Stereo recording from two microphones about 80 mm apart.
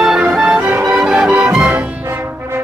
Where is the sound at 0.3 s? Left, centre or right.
Centre.